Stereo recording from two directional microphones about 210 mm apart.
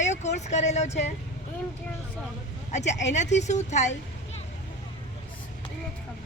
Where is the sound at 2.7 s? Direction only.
35° left (ahead or behind).